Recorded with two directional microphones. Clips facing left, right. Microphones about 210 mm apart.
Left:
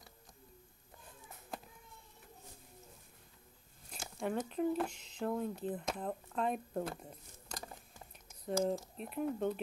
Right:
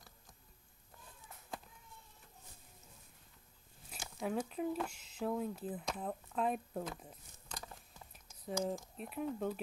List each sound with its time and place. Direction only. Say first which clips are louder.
3.9 s speech: left 1 dB; centre (ahead or behind)
8.5 s speech: left 4 dB; centre (ahead or behind)